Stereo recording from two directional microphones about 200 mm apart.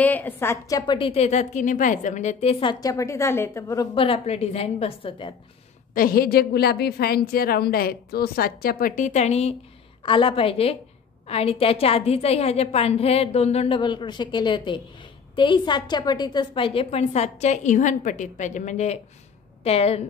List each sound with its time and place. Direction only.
0.0 s a woman's voice: 10° left (ahead or behind); by 5.3 s 30° left (ahead or behind)
5.9 s a woman's voice: 45° left (ahead or behind); by 20.0 s 30° left (ahead or behind)